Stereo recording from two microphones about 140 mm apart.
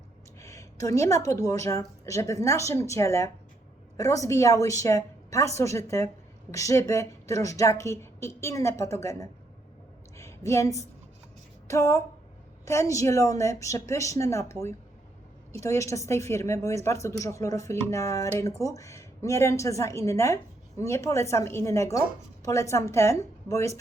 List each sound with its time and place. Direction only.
0.3 s a woman's voice: 20° left (ahead or behind)
10.2 s a sound: 20° left (ahead or behind)
11.7 s a woman's voice: 20° left (ahead or behind)